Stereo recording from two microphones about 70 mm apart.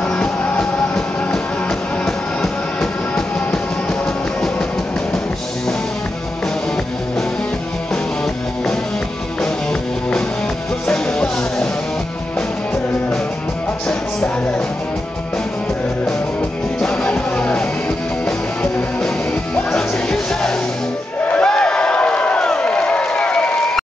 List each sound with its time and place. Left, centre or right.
0.1 s music: centre
10.9 s music: centre
16.8 s music: centre
21.3 s a sound: centre